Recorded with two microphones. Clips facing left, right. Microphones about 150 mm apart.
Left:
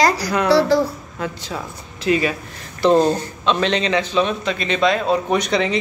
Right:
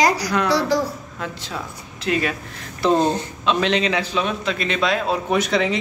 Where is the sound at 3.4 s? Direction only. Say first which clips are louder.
Left 1 dB; 5° right (ahead or behind).